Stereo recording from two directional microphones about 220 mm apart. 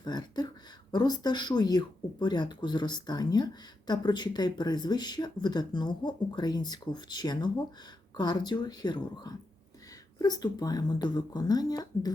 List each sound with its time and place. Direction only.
0.0 s speech: 20° left (ahead or behind)